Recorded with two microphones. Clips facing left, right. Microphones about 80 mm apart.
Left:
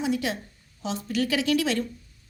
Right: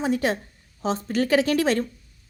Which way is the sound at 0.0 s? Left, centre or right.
Right.